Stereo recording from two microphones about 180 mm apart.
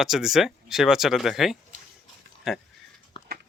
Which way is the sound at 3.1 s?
25° left (ahead or behind).